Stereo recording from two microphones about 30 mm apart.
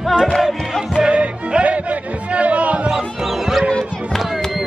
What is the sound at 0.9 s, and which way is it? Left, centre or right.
Music, right.